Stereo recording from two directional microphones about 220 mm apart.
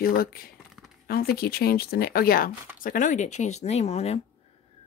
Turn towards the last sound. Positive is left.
turn(degrees=30)  # may be behind; listen again after turning